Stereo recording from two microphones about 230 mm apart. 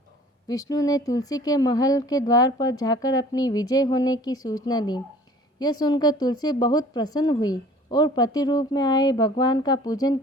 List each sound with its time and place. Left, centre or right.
0.4 s speech: centre